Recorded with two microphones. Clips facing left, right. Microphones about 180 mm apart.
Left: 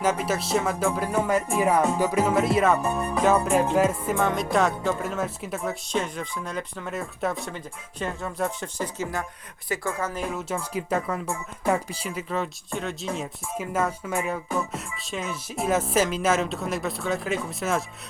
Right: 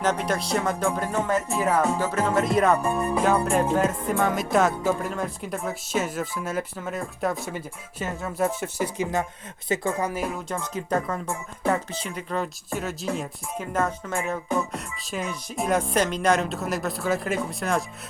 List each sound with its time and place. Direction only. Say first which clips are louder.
0.0 s speech: even; 5° left (ahead or behind)
2.0 s music: left 2 dB; 15° left (ahead or behind); by 9.2 s 15° right (ahead or behind)
9.6 s speech: right 3 dB; 20° right (ahead or behind)
10.2 s music: even; 5° left (ahead or behind)